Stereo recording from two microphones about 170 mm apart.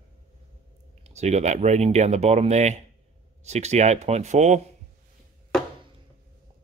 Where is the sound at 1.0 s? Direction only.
40° right (ahead or behind).